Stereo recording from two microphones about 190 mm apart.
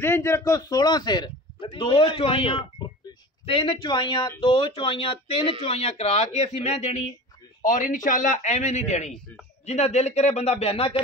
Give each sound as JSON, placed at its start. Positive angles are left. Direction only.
{"t": 0.0, "sound": "speech", "side_deg": 15}